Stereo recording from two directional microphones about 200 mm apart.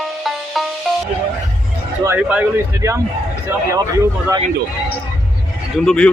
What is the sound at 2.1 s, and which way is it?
Speech, 5° right (ahead or behind).